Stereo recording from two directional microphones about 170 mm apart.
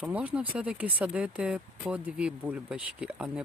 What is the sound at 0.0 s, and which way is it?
Speech, 10° right (ahead or behind).